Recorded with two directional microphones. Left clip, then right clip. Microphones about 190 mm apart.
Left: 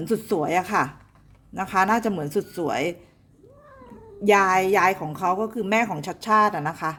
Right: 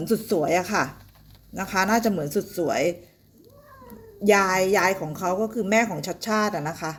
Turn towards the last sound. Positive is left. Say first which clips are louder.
# left 4 dB
turn(degrees=10)  # may be behind; listen again after turning